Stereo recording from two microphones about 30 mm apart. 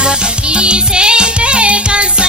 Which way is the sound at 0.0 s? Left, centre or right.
Right.